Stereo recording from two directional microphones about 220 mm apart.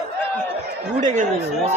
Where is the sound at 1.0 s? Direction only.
35° right (ahead or behind).